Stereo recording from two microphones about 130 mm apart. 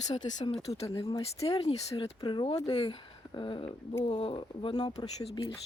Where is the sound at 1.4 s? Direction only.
45° left (ahead or behind).